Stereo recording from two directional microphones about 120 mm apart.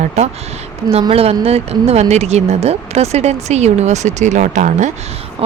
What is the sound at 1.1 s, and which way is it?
Speech, 55° right (ahead or behind).